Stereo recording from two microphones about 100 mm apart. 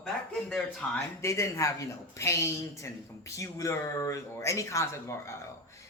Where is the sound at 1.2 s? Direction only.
30° left (ahead or behind).